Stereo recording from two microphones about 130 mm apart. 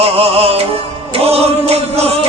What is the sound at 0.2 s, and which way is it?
Music, 50° right (ahead or behind).